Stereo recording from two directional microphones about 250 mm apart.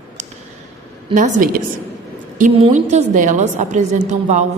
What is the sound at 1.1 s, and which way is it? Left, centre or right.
A woman's voice, right.